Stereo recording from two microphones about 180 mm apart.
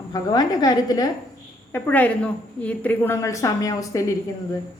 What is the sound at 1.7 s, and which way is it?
A woman's voice, 10° left (ahead or behind).